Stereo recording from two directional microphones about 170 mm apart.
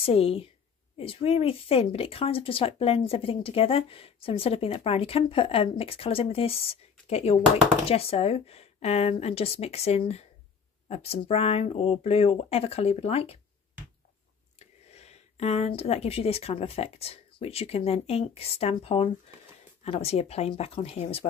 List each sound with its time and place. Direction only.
0.0 s a woman's voice: 35° left (ahead or behind)
14.6 s a woman's voice: 40° left (ahead or behind)